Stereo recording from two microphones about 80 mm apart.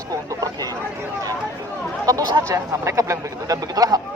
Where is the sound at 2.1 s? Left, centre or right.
Right.